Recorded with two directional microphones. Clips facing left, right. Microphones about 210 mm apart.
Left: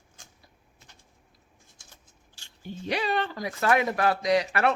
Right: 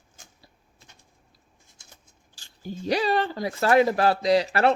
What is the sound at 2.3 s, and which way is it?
Speech, 35° right (ahead or behind).